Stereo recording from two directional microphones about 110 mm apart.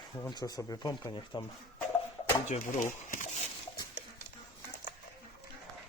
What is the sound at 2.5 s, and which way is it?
Speech, 90° left.